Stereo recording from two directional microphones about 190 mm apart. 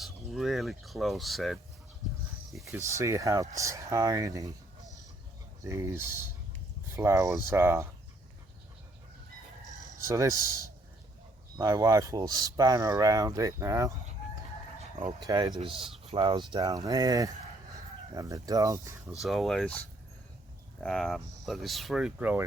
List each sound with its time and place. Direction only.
0.0 s speech: centre (ahead or behind)
2.6 s speech: 15° right (ahead or behind)
5.6 s speech: 15° right (ahead or behind)
10.0 s speech: 15° right (ahead or behind)
15.3 s speech: 20° right (ahead or behind)
19.2 s speech: centre (ahead or behind)